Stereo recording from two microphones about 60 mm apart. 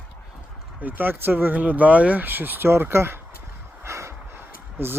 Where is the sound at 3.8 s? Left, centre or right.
Right.